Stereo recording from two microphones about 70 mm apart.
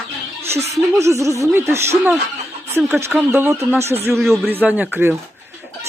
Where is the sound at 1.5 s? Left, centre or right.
Right.